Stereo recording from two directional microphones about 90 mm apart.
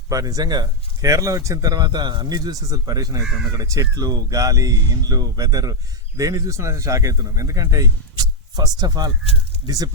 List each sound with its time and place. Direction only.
0.1 s speech: 40° right (ahead or behind)